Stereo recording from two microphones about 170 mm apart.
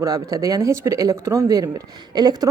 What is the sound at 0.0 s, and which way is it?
A woman's voice, 20° right (ahead or behind).